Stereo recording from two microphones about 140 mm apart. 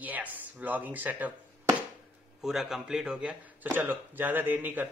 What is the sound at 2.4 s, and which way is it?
Speech, centre (ahead or behind).